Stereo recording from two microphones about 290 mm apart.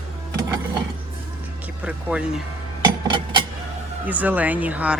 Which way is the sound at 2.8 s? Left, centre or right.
Centre.